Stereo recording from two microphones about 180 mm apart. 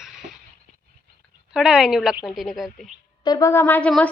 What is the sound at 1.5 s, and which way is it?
A woman's voice, 5° right (ahead or behind).